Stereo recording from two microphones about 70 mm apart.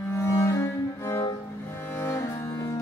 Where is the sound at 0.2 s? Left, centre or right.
Left.